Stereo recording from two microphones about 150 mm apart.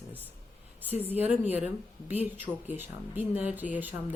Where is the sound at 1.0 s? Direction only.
10° right (ahead or behind).